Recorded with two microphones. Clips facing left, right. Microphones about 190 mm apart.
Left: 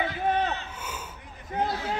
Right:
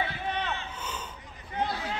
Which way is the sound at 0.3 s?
40° left (ahead or behind).